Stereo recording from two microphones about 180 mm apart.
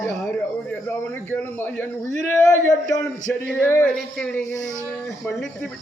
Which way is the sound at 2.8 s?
15° left (ahead or behind).